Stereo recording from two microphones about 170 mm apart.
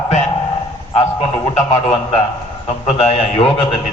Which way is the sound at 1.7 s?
40° left (ahead or behind).